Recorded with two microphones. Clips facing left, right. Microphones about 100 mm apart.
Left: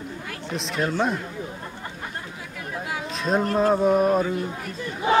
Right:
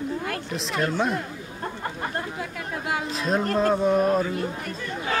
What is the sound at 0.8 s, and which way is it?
Speech, centre (ahead or behind).